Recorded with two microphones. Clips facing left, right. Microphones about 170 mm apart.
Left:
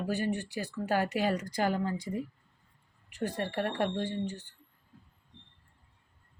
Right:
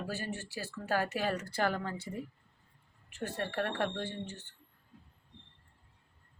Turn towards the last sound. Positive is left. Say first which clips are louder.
# left 6 dB
turn(degrees=10)  # may be behind; listen again after turning